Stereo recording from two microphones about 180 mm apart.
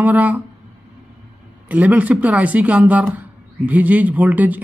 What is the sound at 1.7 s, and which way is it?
Speech, 10° right (ahead or behind).